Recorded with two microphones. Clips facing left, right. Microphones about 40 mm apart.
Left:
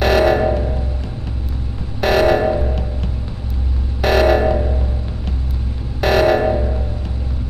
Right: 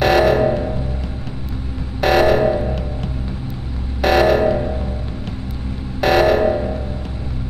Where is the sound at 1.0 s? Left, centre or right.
Centre.